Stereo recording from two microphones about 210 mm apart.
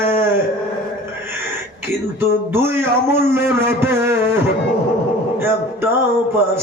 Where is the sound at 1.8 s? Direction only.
10° right (ahead or behind).